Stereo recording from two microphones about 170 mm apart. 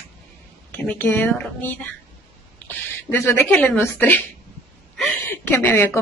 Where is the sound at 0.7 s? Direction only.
10° left (ahead or behind).